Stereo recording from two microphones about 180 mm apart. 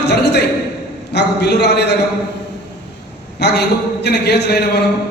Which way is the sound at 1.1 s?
70° left (ahead or behind).